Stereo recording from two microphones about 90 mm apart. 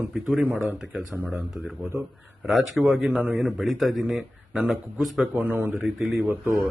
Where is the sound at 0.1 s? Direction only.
Centre (ahead or behind).